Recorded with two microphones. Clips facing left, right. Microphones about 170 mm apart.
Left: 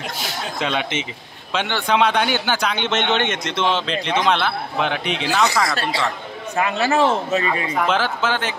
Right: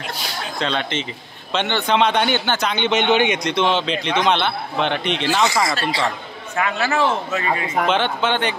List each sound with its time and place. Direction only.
0.6 s speech: 10° left (ahead or behind)
6.5 s a man's voice: 25° left (ahead or behind)
7.9 s speech: centre (ahead or behind)